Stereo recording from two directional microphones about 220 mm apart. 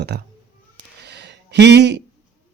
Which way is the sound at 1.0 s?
50° right (ahead or behind).